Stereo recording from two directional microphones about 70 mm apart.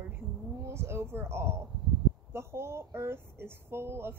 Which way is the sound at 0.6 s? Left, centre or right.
Right.